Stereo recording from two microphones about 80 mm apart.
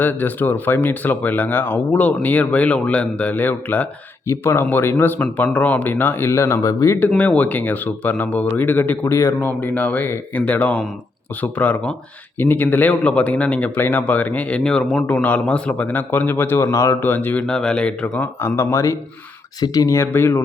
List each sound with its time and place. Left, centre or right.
0.0 s speech: left
7.2 s speech: centre
15.0 s speech: centre; by 17.0 s left
17.0 s speech: left
17.4 s speech: centre; by 18.9 s left
19.5 s speech: left
20.0 s speech: left